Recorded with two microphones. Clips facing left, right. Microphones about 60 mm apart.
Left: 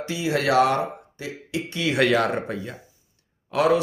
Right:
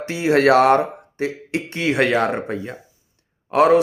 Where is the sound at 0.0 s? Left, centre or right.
Right.